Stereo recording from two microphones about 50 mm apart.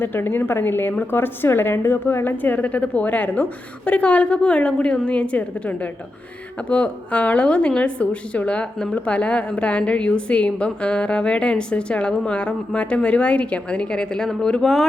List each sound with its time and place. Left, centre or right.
0.0 s a woman's voice: left; by 14.8 s centre